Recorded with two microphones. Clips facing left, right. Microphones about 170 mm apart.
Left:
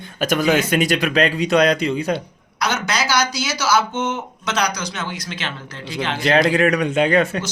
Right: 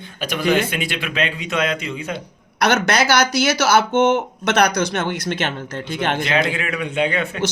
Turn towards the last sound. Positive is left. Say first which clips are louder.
# left 4 dB
turn(degrees=40)  # may be behind; listen again after turning